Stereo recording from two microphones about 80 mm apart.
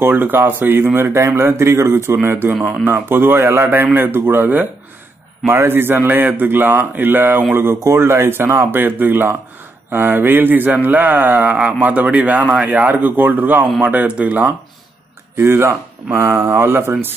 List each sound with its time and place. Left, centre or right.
0.0 s a man's voice: right
15.3 s a man's voice: right